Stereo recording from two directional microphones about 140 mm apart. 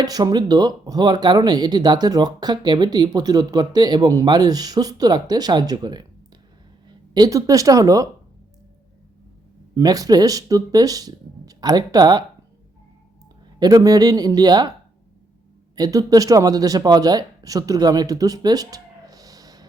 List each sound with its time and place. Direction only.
0.0 s speech: 25° right (ahead or behind)
9.7 s speech: 25° right (ahead or behind)
13.6 s speech: 25° right (ahead or behind)
15.7 s speech: 25° right (ahead or behind)